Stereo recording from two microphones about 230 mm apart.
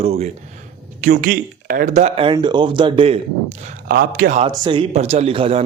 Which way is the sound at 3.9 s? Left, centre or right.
Right.